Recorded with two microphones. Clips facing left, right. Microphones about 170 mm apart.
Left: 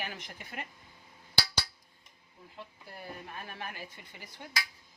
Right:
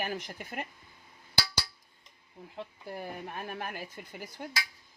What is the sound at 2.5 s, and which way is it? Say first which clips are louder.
Speech: right 8 dB; 45° right (ahead or behind).